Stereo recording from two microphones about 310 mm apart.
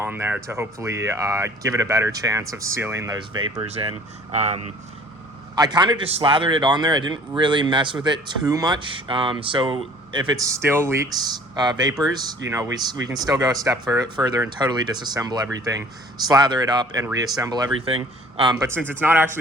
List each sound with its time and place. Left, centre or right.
0.0 s a man's voice: centre